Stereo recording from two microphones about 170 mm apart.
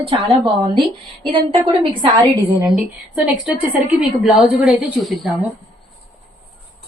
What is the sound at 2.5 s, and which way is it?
A woman's voice, 5° right (ahead or behind).